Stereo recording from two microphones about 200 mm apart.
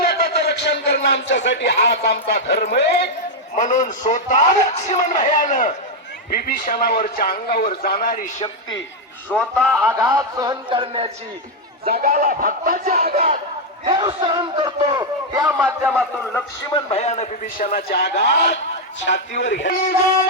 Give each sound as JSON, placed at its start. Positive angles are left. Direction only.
{"t": 0.0, "sound": "a man's voice", "side_deg": 50}
{"t": 3.5, "sound": "a man's voice", "side_deg": 40}
{"t": 9.3, "sound": "a man's voice", "side_deg": 5}
{"t": 10.0, "sound": "a man's voice", "side_deg": -15}
{"t": 11.9, "sound": "speech", "side_deg": -45}
{"t": 13.8, "sound": "a man's voice", "side_deg": -20}
{"t": 15.5, "sound": "a man's voice", "side_deg": -5}
{"t": 16.0, "sound": "a man's voice", "side_deg": 5}
{"t": 16.6, "sound": "a man's voice", "side_deg": 25}
{"t": 17.6, "sound": "speech", "side_deg": 50}